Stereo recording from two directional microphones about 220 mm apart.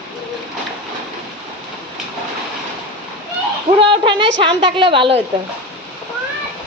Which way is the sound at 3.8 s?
25° right (ahead or behind).